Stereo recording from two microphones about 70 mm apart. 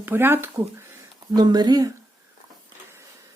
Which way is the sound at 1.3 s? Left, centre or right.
Right.